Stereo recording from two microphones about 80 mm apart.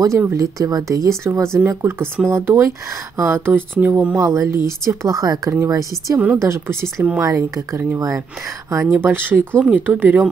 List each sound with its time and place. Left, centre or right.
0.2 s speech: right
4.2 s speech: right
6.1 s speech: right
6.4 s speech: right